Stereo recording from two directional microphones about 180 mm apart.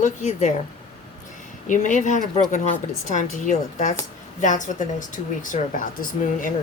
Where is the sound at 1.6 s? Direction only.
45° left (ahead or behind).